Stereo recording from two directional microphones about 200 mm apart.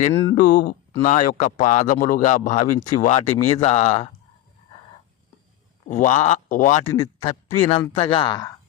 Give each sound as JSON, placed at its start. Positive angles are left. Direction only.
{"t": 0.0, "sound": "speech", "side_deg": 45}
{"t": 5.9, "sound": "speech", "side_deg": 40}
{"t": 6.8, "sound": "a man's voice", "side_deg": 15}
{"t": 7.7, "sound": "speech", "side_deg": 25}